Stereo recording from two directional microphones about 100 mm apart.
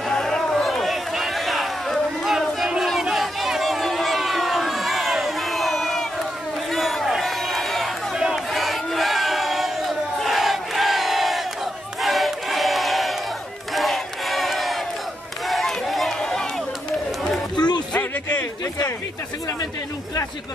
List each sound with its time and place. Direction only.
0.1 s a sound: 5° left (ahead or behind)
6.7 s crowd: centre (ahead or behind)
13.7 s battle cry: centre (ahead or behind)
15.4 s crowd: centre (ahead or behind)
17.6 s music: 45° left (ahead or behind)